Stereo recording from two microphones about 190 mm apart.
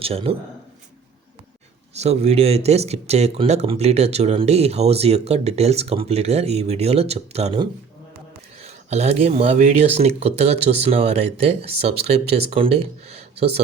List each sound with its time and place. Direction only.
0.0 s speech: 30° right (ahead or behind)
1.9 s speech: 35° right (ahead or behind)